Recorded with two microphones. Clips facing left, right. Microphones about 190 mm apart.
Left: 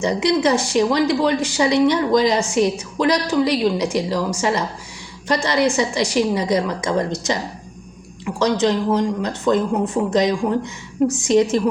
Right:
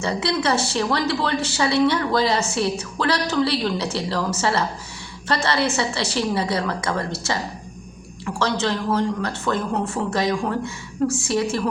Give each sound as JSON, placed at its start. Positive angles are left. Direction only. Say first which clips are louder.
{"t": 0.0, "sound": "speech", "louder": "left 5 dB", "side_deg": 15}